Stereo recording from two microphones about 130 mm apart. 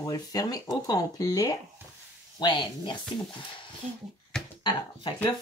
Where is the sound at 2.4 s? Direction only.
35° left (ahead or behind).